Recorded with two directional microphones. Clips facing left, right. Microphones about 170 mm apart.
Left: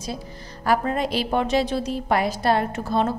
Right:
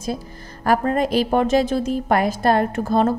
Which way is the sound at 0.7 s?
50° right (ahead or behind).